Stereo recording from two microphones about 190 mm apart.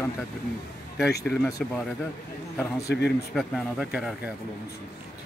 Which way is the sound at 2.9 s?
60° left (ahead or behind).